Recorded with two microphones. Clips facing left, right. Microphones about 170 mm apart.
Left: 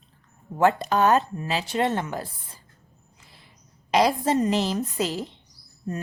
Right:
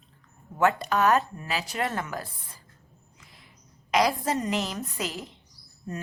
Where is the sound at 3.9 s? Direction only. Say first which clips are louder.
Left 3 dB; 30° left (ahead or behind).